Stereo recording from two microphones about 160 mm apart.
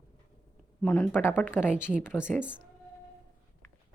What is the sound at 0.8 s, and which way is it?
Speech, 10° left (ahead or behind).